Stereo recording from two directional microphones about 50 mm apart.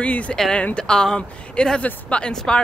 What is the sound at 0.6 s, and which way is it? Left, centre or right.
Speech, left.